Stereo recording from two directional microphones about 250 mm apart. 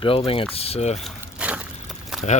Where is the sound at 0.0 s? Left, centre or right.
Left.